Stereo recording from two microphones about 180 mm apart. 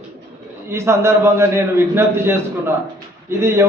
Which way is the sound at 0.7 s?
15° right (ahead or behind).